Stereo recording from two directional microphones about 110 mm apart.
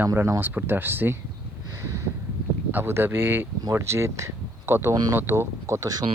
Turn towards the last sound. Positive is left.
turn(degrees=-30)  # may be behind; listen again after turning